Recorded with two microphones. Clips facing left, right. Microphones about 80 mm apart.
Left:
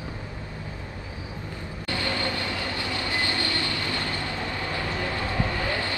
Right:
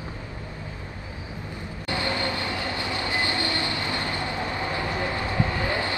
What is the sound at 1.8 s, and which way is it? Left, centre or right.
Train, right.